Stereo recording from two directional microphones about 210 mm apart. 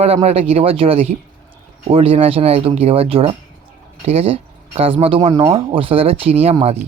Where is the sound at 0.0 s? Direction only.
30° right (ahead or behind).